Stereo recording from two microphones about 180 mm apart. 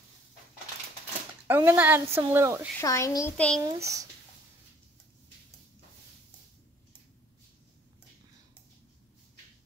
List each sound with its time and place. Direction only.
1.5 s a woman's voice: 10° right (ahead or behind)
2.8 s a woman's voice: 15° left (ahead or behind)
3.3 s a child's voice: 5° left (ahead or behind)
3.6 s a child's voice: 20° right (ahead or behind)